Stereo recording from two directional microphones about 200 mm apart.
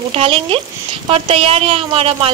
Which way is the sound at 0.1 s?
30° right (ahead or behind).